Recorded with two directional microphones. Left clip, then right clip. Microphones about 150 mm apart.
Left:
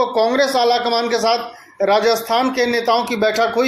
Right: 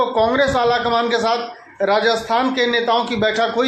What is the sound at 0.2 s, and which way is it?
Speech, 40° left (ahead or behind).